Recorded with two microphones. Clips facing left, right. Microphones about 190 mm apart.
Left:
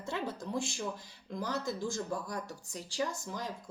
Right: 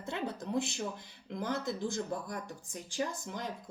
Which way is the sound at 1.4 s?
20° right (ahead or behind).